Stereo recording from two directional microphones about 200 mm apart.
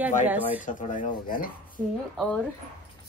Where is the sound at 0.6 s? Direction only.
40° left (ahead or behind).